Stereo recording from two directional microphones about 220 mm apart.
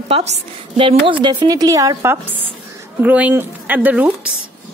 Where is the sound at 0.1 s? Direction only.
30° right (ahead or behind); by 4.3 s 5° right (ahead or behind).